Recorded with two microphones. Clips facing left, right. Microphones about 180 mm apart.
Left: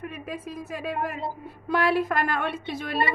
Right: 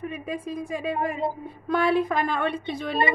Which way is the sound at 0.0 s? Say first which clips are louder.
Right 3 dB; 5° left (ahead or behind).